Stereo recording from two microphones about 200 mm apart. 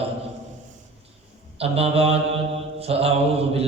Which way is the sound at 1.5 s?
30° right (ahead or behind).